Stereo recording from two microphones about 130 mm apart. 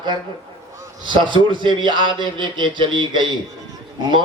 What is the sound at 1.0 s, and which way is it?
A man's voice, 35° right (ahead or behind).